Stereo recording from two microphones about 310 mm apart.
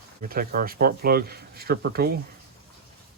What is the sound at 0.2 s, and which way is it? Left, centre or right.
Speech, right.